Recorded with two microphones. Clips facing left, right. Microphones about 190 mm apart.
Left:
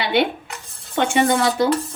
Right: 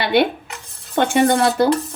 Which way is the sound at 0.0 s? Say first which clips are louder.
Right 3 dB; 40° right (ahead or behind).